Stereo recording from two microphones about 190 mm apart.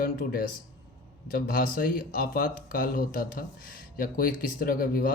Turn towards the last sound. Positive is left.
turn(degrees=50)  # may be behind; listen again after turning